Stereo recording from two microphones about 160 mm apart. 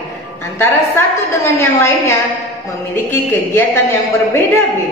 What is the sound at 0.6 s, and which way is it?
A woman's voice, 15° left (ahead or behind).